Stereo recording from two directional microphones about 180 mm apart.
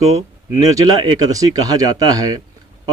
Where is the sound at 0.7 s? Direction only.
20° right (ahead or behind).